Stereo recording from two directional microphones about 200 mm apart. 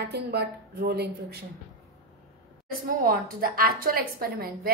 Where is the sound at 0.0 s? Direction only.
55° right (ahead or behind).